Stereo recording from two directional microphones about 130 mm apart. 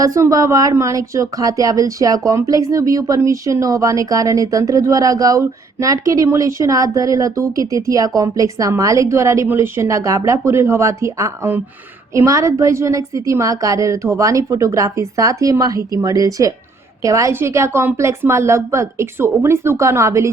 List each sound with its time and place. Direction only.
0.0 s speech: 25° right (ahead or behind)